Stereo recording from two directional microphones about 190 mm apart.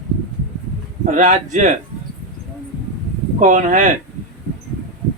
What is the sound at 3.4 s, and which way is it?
Speech, 40° right (ahead or behind).